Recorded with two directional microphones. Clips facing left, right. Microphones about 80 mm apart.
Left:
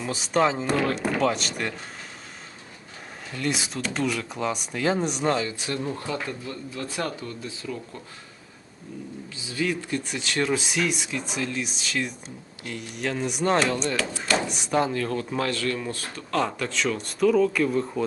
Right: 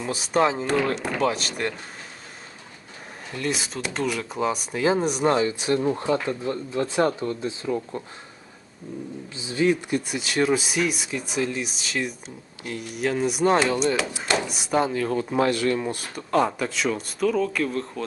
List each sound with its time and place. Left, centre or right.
0.0 s speech: centre
3.3 s speech: centre
5.3 s speech: right
9.3 s speech: right
10.1 s speech: centre